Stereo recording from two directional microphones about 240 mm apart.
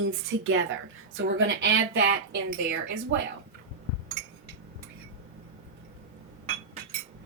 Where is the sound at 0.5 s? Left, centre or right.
Right.